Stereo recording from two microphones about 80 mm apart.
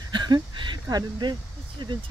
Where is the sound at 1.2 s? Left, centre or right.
Right.